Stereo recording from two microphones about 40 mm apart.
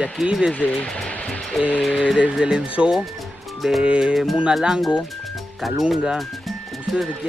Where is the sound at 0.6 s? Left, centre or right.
Left.